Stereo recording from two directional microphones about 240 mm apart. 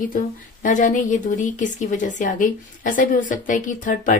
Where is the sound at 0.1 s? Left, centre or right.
Left.